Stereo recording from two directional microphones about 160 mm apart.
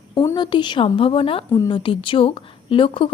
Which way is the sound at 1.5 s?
20° left (ahead or behind).